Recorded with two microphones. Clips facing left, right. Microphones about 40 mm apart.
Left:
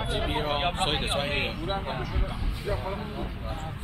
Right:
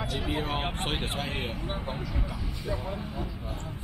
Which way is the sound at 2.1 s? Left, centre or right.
Left.